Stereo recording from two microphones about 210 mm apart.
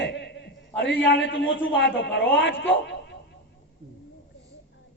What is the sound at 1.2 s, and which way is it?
A woman's voice, 60° left (ahead or behind).